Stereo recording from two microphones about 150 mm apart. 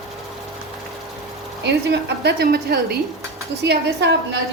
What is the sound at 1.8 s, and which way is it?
A woman's voice, 90° right.